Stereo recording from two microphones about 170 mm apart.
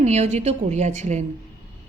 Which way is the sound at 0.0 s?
40° right (ahead or behind).